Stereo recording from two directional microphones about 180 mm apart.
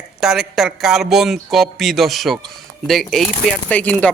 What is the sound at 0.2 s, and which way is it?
Speech, centre (ahead or behind).